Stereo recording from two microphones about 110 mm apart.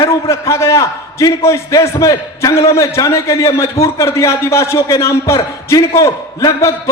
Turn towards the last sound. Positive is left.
turn(degrees=30)  # may be behind; listen again after turning